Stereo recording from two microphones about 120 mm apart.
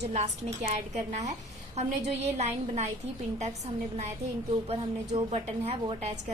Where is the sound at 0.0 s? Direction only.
70° right (ahead or behind).